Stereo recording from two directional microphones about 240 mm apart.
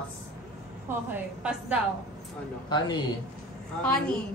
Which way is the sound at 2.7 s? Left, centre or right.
Centre.